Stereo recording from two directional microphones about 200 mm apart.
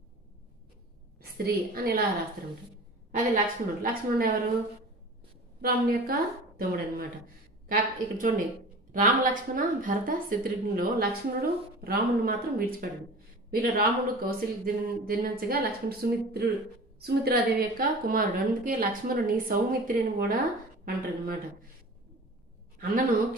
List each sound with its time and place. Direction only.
1.2 s a woman's voice: 50° right (ahead or behind)
3.1 s a woman's voice: 40° right (ahead or behind)
5.6 s a woman's voice: 50° right (ahead or behind)
22.8 s a woman's voice: 45° right (ahead or behind)